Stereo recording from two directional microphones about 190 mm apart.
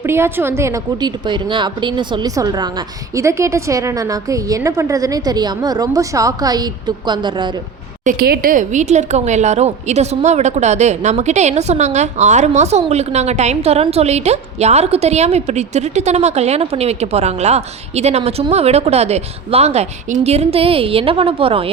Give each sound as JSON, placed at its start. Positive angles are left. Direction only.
{"t": 0.0, "sound": "a woman's voice", "side_deg": -10}
{"t": 8.0, "sound": "speech", "side_deg": -50}